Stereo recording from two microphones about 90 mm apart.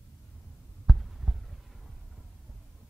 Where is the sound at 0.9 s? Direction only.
Centre (ahead or behind).